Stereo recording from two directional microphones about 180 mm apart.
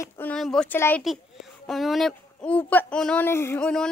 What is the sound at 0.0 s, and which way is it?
Speech, 15° left (ahead or behind).